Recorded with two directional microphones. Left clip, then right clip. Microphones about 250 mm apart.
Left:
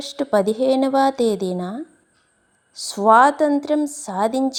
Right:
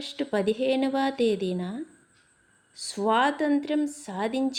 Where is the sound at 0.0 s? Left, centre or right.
Centre.